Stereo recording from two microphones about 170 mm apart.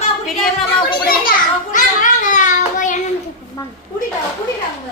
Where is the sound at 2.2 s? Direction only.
50° left (ahead or behind).